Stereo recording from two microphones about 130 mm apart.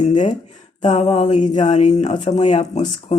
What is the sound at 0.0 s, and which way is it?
Speech, 65° left (ahead or behind).